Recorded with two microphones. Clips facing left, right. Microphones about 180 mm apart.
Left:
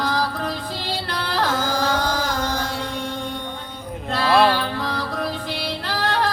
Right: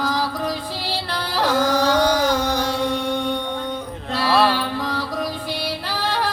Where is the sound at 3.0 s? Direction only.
70° right (ahead or behind).